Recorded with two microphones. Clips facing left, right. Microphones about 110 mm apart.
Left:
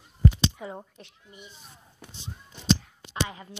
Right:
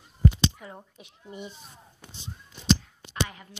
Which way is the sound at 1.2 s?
30° right (ahead or behind).